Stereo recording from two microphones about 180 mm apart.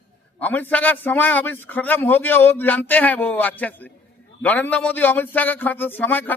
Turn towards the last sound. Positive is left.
turn(degrees=10)  # may be behind; listen again after turning